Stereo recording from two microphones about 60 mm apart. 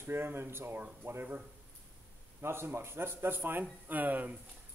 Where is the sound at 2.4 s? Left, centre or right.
Right.